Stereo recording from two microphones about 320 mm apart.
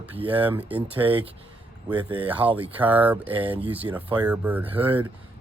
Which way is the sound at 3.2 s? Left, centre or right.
Centre.